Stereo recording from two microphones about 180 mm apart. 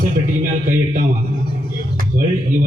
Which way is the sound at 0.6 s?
50° right (ahead or behind).